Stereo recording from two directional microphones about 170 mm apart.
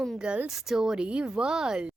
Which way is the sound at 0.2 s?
5° right (ahead or behind).